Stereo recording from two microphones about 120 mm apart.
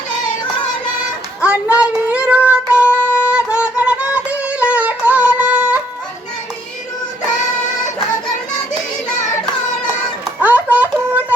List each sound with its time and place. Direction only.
1.4 s child singing: 10° right (ahead or behind)
2.7 s music: 20° left (ahead or behind)
3.3 s music: 10° right (ahead or behind)
10.4 s a sound: 15° right (ahead or behind)